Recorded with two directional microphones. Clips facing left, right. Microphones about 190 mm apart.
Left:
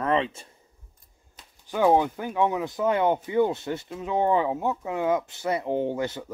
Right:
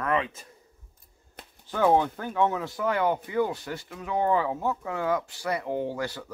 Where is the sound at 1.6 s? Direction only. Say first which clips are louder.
Left 2 dB; 15° left (ahead or behind).